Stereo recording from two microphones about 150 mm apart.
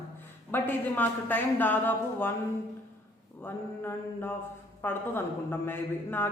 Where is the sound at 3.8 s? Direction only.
15° left (ahead or behind).